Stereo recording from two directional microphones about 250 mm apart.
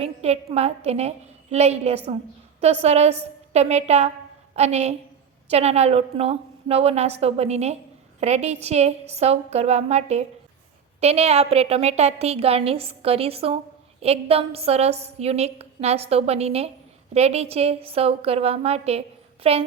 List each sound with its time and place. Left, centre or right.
0.0 s a woman's voice: right